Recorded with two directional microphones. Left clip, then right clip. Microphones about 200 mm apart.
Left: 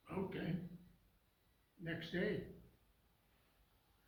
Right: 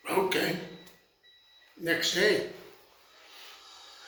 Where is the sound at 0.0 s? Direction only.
5° right (ahead or behind).